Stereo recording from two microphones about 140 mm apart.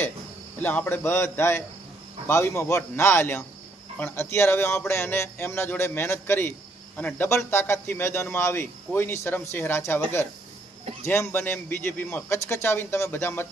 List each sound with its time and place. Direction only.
0.6 s a man's voice: 10° left (ahead or behind)
11.1 s a man's voice: 15° left (ahead or behind)